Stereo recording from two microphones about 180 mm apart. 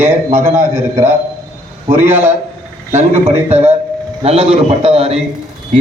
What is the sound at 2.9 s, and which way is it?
A man's voice, 35° right (ahead or behind).